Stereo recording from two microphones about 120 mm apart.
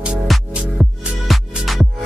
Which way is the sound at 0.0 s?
10° right (ahead or behind).